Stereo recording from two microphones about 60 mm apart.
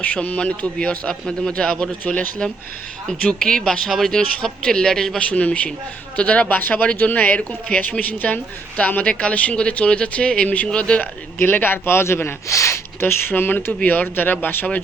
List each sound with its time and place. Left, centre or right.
0.0 s speech: left
11.0 s speech: left
13.0 s speech: left
13.8 s speech: left